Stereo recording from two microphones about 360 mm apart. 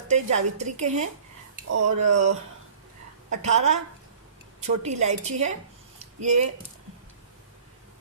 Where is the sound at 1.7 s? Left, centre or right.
Right.